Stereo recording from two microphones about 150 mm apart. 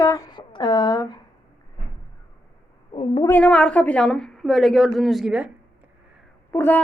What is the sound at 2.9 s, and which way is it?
Speech, 40° left (ahead or behind).